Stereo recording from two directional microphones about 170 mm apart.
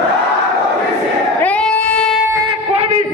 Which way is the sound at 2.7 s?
35° right (ahead or behind).